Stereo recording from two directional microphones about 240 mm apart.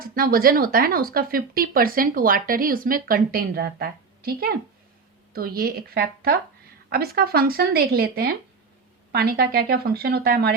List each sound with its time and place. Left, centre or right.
0.0 s speech: right